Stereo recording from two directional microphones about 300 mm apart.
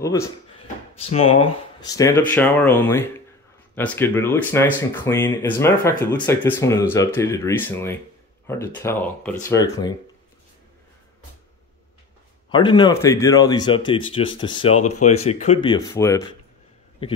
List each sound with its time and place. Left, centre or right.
0.0 s speech: centre
12.4 s speech: centre